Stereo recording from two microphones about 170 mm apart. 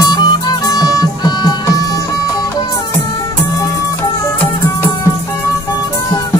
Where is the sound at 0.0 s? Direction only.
25° left (ahead or behind).